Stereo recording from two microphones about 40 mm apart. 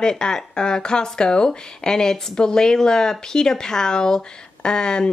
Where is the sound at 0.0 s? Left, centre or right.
Centre.